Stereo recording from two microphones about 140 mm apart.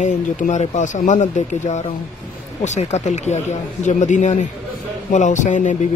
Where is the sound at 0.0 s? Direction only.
60° left (ahead or behind).